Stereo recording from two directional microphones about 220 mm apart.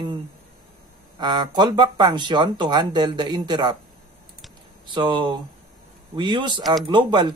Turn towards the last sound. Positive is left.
turn(degrees=-20)  # may be behind; listen again after turning